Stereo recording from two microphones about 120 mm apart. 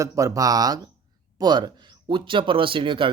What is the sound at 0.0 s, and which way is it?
Speech, 30° right (ahead or behind).